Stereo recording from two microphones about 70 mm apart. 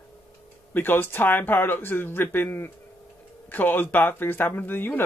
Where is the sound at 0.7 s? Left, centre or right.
Left.